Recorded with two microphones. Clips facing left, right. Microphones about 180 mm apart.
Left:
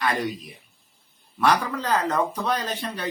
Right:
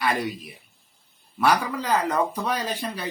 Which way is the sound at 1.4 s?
10° right (ahead or behind).